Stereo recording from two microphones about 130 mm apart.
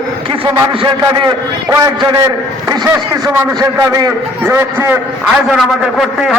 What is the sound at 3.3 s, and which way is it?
A man's voice, 25° right (ahead or behind).